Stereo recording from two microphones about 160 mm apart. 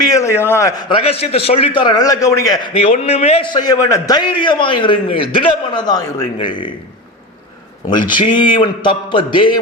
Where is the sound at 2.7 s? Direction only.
40° left (ahead or behind).